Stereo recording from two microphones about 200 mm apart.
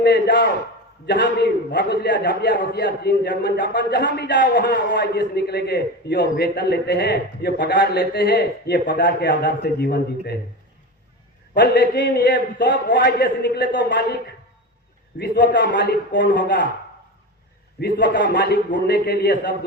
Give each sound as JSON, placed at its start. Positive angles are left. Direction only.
{"t": 0.0, "sound": "a man's voice", "side_deg": 55}
{"t": 11.5, "sound": "a man's voice", "side_deg": 55}
{"t": 15.2, "sound": "a man's voice", "side_deg": 45}
{"t": 16.4, "sound": "a man's voice", "side_deg": 45}
{"t": 17.7, "sound": "a man's voice", "side_deg": 55}